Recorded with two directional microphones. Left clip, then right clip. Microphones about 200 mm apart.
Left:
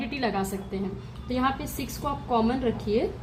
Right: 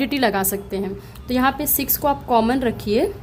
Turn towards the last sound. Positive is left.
turn(degrees=-60)  # may be behind; listen again after turning